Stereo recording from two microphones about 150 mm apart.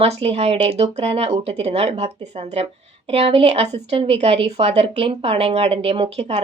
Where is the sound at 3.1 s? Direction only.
40° right (ahead or behind).